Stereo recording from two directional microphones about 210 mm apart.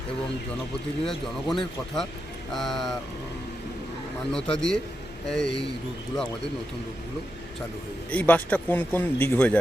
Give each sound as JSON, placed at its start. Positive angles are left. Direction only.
{"t": 1.0, "sound": "speech", "side_deg": 0}
{"t": 4.3, "sound": "speech", "side_deg": 5}
{"t": 8.1, "sound": "speech", "side_deg": 5}